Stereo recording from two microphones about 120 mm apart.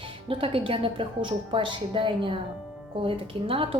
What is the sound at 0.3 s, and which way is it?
A woman's voice, 50° right (ahead or behind).